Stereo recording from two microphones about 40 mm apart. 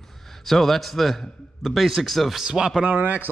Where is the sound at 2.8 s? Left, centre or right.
Right.